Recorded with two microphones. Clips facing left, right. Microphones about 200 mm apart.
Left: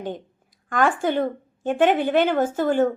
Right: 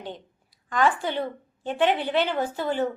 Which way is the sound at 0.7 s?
50° left (ahead or behind).